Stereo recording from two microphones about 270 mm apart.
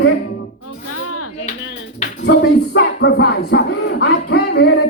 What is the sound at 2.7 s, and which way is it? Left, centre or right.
Music, left.